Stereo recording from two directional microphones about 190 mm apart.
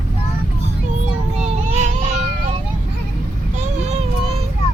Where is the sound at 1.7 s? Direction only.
35° right (ahead or behind).